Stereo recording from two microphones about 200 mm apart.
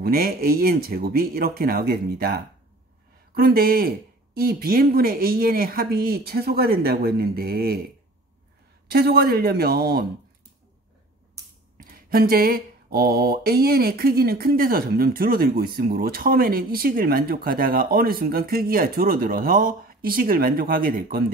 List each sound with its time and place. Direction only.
0.0 s mantra: 50° right (ahead or behind)
8.8 s mantra: 50° right (ahead or behind)
11.8 s mantra: 50° right (ahead or behind)